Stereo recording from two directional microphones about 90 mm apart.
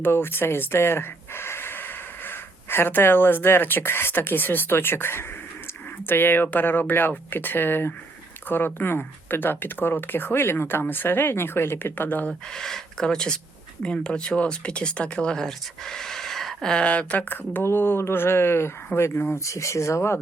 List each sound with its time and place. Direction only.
0.0 s speech: 25° left (ahead or behind)
12.3 s speech: 5° left (ahead or behind); by 20.1 s 30° left (ahead or behind)